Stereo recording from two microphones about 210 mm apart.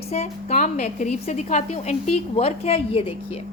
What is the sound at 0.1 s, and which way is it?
A woman's voice, 35° left (ahead or behind).